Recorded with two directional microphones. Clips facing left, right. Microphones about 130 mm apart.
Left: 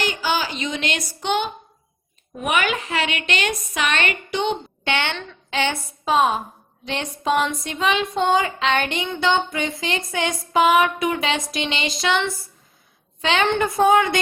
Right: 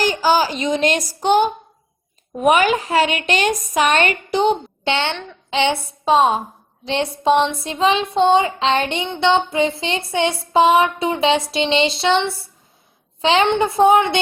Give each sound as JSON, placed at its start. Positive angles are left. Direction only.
{"t": 0.0, "sound": "a woman's voice", "side_deg": -40}
{"t": 4.9, "sound": "speech", "side_deg": -20}